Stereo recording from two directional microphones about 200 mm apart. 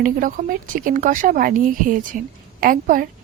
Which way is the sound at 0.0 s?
40° right (ahead or behind).